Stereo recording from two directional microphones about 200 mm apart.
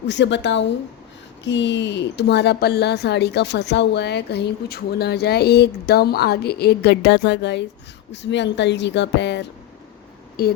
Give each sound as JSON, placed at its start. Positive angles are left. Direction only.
{"t": 0.1, "sound": "speech", "side_deg": 60}